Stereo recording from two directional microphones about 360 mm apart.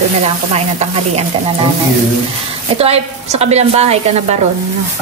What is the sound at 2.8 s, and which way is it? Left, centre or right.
Speech, centre.